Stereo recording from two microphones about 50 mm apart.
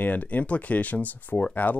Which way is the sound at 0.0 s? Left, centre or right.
Left.